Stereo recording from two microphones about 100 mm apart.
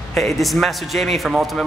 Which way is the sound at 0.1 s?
Centre (ahead or behind).